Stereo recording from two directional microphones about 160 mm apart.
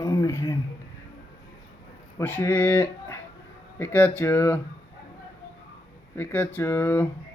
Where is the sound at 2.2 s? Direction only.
10° left (ahead or behind).